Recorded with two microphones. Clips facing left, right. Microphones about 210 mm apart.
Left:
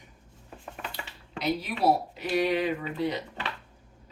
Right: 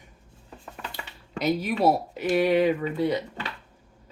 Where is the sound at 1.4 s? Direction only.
45° right (ahead or behind).